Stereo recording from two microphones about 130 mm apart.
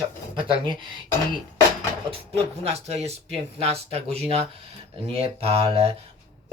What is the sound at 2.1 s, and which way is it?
Speech, 50° right (ahead or behind).